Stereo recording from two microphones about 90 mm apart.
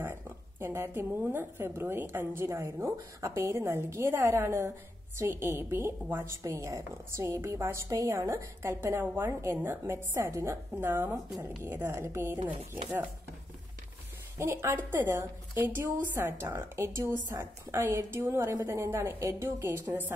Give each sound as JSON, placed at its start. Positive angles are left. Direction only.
{"t": 0.0, "sound": "a woman's voice", "side_deg": -25}
{"t": 14.4, "sound": "a woman's voice", "side_deg": -30}